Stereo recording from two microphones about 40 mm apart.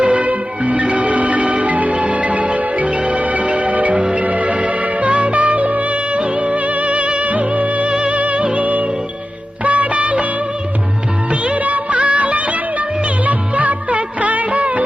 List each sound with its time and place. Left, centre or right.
0.0 s music: right
3.9 s music: right
4.2 s music: right
11.3 s music: right
11.6 s music of bollywood: right
13.2 s music: right